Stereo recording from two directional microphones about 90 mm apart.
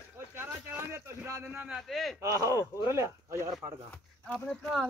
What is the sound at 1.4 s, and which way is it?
Speech, 10° right (ahead or behind).